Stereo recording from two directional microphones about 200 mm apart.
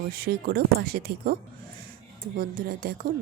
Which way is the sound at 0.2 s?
50° right (ahead or behind).